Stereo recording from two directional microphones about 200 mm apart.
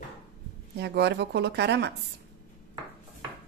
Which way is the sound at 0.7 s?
55° right (ahead or behind).